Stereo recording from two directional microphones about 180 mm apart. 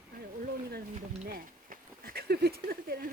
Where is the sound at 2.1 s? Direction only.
60° right (ahead or behind).